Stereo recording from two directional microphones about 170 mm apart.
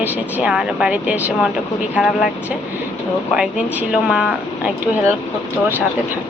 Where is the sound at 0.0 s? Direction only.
10° right (ahead or behind).